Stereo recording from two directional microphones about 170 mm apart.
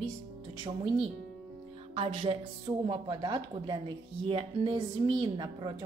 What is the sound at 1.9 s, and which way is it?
A woman's voice, 35° right (ahead or behind).